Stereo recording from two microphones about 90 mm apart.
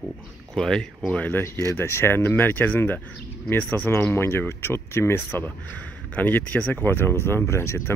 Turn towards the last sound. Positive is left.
turn(degrees=30)  # may be behind; listen again after turning